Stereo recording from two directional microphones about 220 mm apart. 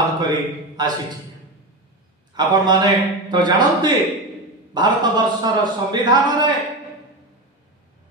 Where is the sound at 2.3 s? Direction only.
20° right (ahead or behind).